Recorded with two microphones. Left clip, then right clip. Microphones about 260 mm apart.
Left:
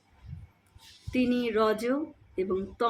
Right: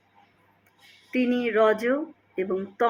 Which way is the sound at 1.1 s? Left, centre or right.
Centre.